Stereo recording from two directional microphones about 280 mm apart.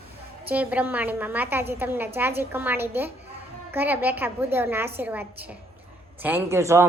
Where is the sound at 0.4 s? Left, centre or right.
Centre.